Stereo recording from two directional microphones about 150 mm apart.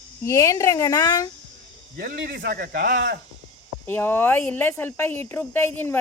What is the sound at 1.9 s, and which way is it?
Speech, 85° right.